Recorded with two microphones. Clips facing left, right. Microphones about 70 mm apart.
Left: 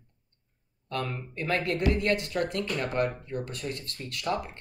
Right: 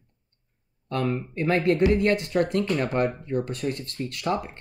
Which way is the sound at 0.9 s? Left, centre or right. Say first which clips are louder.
Right 6 dB; right.